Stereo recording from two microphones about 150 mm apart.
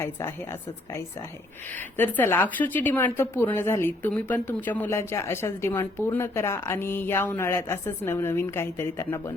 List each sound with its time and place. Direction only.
0.0 s a woman's voice: 15° left (ahead or behind)
2.0 s a woman's voice: 15° left (ahead or behind)